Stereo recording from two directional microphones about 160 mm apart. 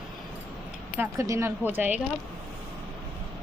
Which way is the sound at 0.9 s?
15° right (ahead or behind).